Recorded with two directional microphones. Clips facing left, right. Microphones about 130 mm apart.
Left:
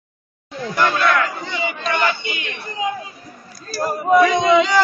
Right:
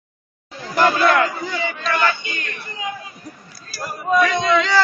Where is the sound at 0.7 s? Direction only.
35° right (ahead or behind).